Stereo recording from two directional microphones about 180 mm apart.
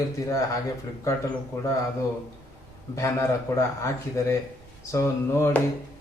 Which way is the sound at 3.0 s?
15° left (ahead or behind).